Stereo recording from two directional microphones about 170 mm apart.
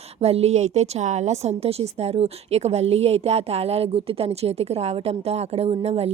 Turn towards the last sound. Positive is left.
turn(degrees=-35)  # may be behind; listen again after turning